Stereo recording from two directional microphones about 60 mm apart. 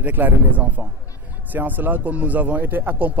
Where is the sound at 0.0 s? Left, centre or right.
Right.